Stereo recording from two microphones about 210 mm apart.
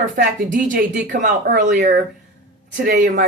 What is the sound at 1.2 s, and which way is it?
Speech, 40° right (ahead or behind).